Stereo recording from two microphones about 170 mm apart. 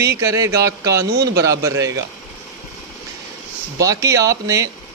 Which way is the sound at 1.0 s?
75° right (ahead or behind).